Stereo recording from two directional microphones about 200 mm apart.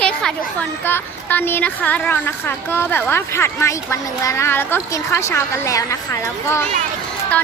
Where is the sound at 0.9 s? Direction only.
10° left (ahead or behind).